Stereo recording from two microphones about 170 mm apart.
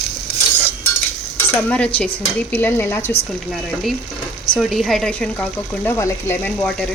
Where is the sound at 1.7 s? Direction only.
10° left (ahead or behind).